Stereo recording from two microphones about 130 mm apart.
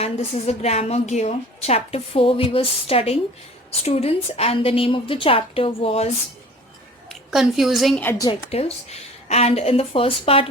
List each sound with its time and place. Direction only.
0.0 s a woman's voice: 50° left (ahead or behind)
7.1 s a woman's voice: centre (ahead or behind)
8.4 s a woman's voice: 50° left (ahead or behind)